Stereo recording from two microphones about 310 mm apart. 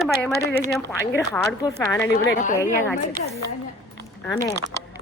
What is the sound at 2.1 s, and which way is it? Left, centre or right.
Speech, left.